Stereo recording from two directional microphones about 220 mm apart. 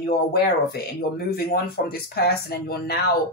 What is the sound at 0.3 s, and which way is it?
Speech, 45° left (ahead or behind).